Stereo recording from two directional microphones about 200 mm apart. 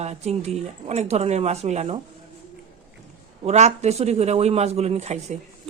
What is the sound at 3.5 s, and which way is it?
Speech, 35° right (ahead or behind).